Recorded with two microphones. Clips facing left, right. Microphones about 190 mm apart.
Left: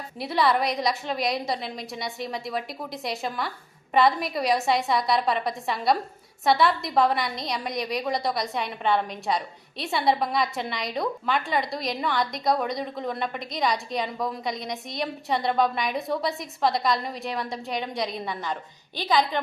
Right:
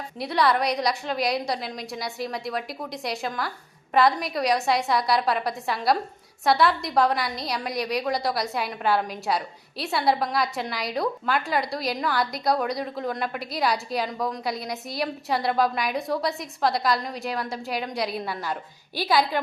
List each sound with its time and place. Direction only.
0.2 s a woman's voice: centre (ahead or behind)